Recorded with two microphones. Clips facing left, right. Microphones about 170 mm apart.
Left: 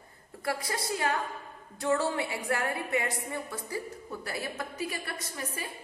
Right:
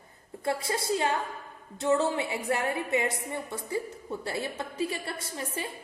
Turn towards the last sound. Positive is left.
turn(degrees=-25)  # may be behind; listen again after turning